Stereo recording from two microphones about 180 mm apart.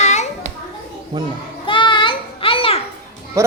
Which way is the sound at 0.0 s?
40° left (ahead or behind).